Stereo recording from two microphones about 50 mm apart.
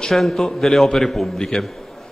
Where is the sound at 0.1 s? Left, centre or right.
Centre.